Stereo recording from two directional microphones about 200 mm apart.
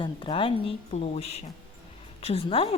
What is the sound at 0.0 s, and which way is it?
A woman's voice, 25° left (ahead or behind).